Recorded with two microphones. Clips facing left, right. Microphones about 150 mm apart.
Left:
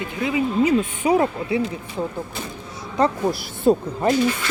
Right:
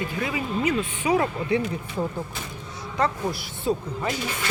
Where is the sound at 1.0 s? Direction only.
35° left (ahead or behind).